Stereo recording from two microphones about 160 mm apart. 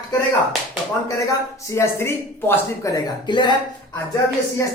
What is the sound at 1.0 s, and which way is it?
Speech, 20° left (ahead or behind).